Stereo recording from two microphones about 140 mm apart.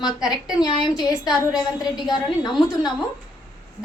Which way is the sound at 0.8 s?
Centre (ahead or behind).